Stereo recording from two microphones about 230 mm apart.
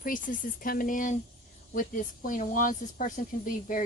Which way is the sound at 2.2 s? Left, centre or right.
Left.